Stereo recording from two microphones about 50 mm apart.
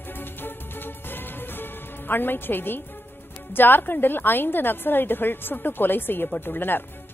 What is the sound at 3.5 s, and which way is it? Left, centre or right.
A woman's voice, left.